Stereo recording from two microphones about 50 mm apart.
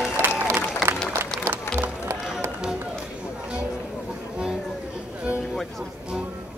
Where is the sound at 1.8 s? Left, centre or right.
Right.